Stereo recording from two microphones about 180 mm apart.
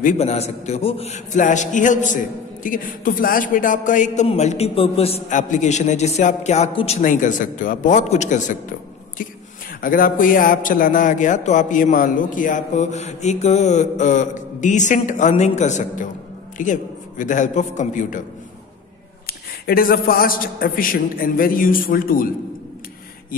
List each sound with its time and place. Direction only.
0.0 s a man's voice: 35° left (ahead or behind)
7.0 s a man's voice: 45° left (ahead or behind)
9.8 s a man's voice: 50° left (ahead or behind)
19.2 s a man's voice: 55° left (ahead or behind)